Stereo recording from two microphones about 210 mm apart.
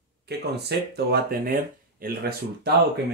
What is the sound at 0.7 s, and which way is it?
Speech, 50° right (ahead or behind).